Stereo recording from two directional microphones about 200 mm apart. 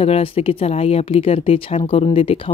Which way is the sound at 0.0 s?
30° left (ahead or behind).